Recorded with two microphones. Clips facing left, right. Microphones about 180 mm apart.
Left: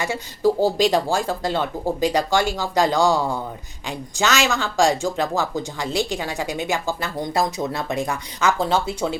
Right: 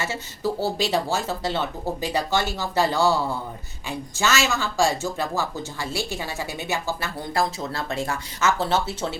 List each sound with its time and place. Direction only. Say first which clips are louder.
0.0 s a woman's voice: left 7 dB; 15° left (ahead or behind)